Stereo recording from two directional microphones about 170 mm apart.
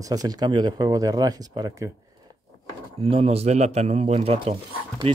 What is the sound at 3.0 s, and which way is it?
Speech, 35° right (ahead or behind).